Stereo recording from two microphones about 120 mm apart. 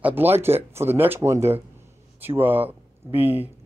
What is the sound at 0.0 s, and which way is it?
Speech, 15° right (ahead or behind).